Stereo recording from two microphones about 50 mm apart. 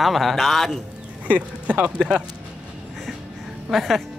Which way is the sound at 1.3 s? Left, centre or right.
Right.